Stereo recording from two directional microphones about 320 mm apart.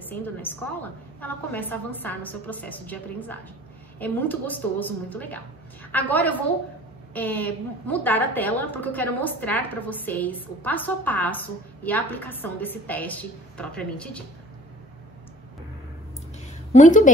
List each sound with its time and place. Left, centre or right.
0.0 s a woman's voice: centre
16.7 s a woman's voice: left